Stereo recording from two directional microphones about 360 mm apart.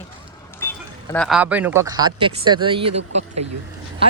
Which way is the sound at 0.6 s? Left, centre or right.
Centre.